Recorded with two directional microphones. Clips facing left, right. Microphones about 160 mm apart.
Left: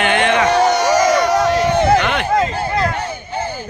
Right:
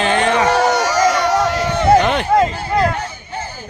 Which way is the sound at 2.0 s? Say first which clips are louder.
Right 3 dB; 40° right (ahead or behind).